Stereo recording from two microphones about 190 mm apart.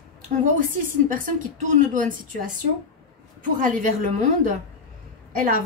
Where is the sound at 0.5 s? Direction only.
45° right (ahead or behind).